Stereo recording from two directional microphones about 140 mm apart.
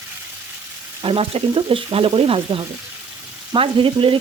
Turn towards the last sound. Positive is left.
turn(degrees=-40)  # may be behind; listen again after turning